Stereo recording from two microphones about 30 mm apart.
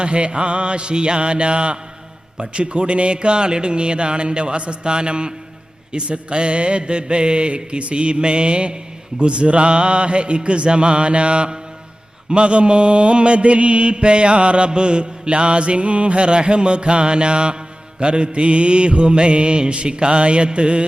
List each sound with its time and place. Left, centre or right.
0.0 s mantra: right